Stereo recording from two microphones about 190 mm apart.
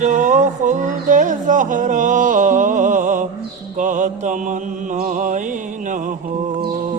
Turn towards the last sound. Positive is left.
turn(degrees=-40)  # may be behind; listen again after turning